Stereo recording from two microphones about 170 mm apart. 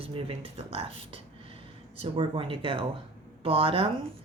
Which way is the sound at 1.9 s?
30° right (ahead or behind).